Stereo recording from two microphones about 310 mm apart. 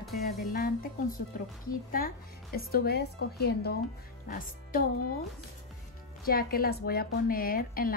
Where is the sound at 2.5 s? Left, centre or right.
Left.